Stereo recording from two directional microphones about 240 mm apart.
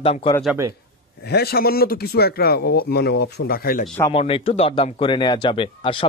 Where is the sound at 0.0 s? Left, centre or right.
Left.